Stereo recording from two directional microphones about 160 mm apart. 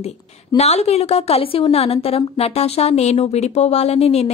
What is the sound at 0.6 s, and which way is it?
A woman's voice, 40° left (ahead or behind).